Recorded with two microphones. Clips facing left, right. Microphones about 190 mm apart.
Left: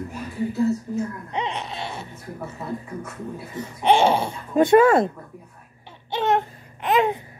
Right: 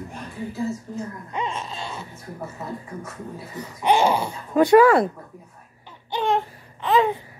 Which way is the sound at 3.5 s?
25° left (ahead or behind).